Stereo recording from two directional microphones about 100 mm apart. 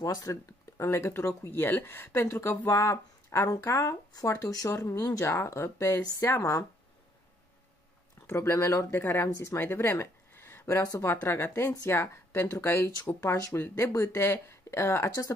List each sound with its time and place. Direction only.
0.0 s speech: 35° left (ahead or behind)
8.3 s speech: 25° left (ahead or behind)